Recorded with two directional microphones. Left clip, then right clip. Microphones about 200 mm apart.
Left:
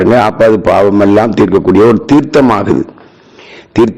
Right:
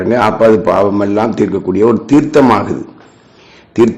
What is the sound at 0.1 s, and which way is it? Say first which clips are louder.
A man's voice: right 1 dB; 40° left (ahead or behind).